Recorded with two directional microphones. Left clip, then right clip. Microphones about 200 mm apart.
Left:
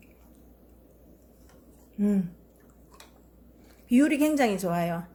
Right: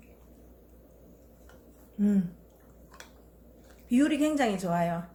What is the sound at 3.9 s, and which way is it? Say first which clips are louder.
A woman's voice: left 3 dB; 35° left (ahead or behind).